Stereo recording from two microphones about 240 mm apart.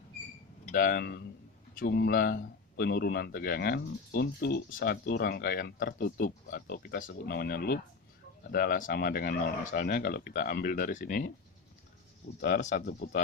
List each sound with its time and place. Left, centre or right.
0.6 s speech: left
12.4 s speech: left